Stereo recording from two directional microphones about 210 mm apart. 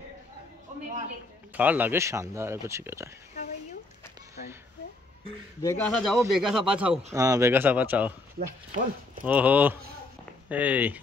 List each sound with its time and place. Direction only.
1.5 s speech: 5° right (ahead or behind)
5.6 s speech: 10° left (ahead or behind); by 8.1 s 5° right (ahead or behind)
8.4 s speech: 40° right (ahead or behind)
9.2 s speech: 5° right (ahead or behind)